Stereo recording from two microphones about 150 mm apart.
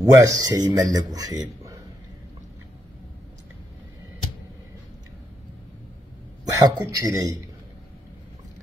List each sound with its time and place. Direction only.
0.0 s a man's voice: 20° right (ahead or behind)
6.5 s a man's voice: 25° right (ahead or behind)